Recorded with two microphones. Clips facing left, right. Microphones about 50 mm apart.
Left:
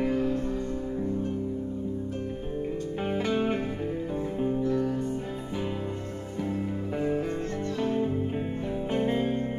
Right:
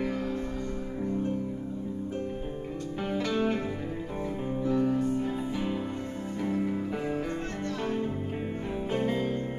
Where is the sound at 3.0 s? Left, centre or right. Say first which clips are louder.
Left 1 dB; left.